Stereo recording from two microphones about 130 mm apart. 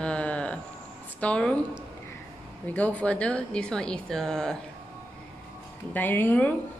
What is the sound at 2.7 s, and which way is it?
Speech, 10° left (ahead or behind).